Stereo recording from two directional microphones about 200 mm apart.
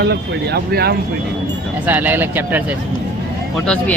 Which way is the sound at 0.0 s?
55° right (ahead or behind).